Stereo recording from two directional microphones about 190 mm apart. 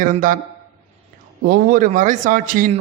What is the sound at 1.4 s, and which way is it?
A man's voice, 50° right (ahead or behind).